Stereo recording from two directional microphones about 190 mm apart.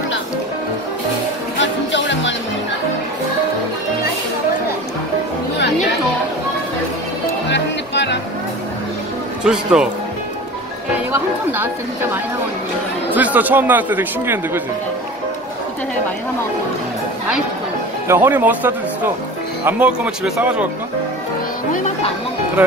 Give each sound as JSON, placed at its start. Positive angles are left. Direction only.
{"t": 1.6, "sound": "music", "side_deg": 75}
{"t": 7.4, "sound": "music", "side_deg": 65}
{"t": 9.4, "sound": "speech", "side_deg": -5}
{"t": 11.1, "sound": "speech", "side_deg": -10}
{"t": 18.0, "sound": "speech", "side_deg": -10}
{"t": 21.7, "sound": "speech", "side_deg": 35}